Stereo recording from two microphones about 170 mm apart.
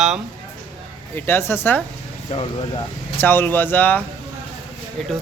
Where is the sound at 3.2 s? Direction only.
10° left (ahead or behind).